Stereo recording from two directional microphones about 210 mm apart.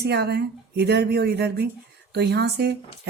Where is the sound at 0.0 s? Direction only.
50° right (ahead or behind).